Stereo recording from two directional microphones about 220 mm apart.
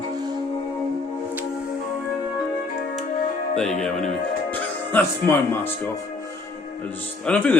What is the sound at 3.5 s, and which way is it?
Speech, 5° left (ahead or behind).